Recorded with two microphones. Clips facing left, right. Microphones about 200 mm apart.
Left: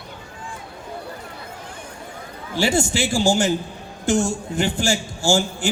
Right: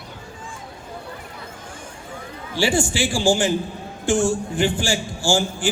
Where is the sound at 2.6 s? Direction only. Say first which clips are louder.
Even; 40° left (ahead or behind).